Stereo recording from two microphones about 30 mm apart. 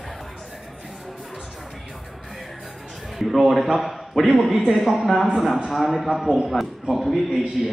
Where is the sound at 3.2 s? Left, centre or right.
Centre.